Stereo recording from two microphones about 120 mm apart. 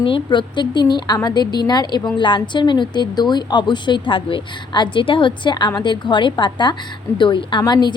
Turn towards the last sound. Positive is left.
turn(degrees=35)  # may be behind; listen again after turning